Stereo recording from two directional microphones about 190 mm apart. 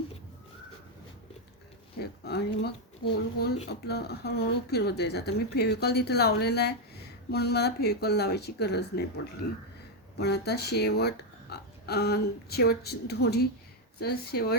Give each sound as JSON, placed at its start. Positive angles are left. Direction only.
{"t": 2.0, "sound": "speech", "side_deg": 60}